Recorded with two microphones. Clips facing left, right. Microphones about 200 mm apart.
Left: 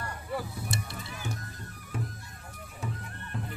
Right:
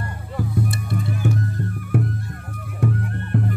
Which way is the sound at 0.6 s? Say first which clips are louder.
Right 12 dB; 55° right (ahead or behind).